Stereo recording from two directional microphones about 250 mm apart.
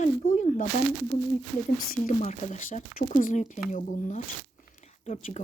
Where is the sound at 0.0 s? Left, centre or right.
Left.